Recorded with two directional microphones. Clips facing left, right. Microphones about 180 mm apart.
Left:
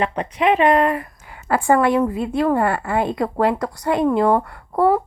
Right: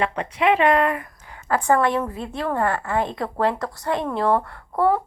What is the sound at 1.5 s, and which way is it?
A woman's voice, 10° left (ahead or behind).